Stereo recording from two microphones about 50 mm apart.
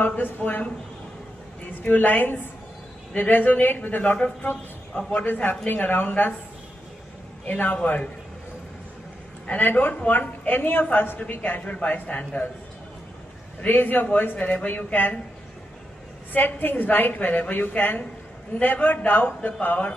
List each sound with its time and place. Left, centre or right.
0.0 s a woman's voice: left
1.7 s a woman's voice: left
7.4 s a man's voice: left
9.5 s a woman's voice: left
13.7 s a woman's voice: left
16.3 s a woman's voice: left